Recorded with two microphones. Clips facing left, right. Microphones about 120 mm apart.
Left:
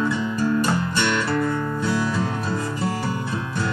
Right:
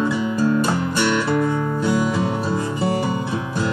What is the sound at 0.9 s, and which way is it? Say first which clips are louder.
Music: right 3 dB; 15° right (ahead or behind).